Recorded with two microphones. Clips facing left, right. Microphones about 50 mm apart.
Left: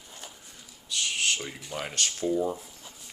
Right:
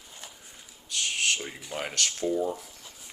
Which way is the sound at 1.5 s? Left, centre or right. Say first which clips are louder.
Right 1 dB; centre.